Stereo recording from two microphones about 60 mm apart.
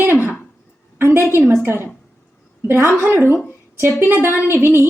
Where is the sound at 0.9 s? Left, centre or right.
Right.